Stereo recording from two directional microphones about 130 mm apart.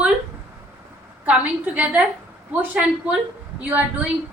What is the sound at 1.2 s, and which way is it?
A woman's voice, 10° right (ahead or behind).